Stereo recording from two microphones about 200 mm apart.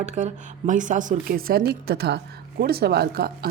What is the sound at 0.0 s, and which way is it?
A woman's voice, 35° right (ahead or behind).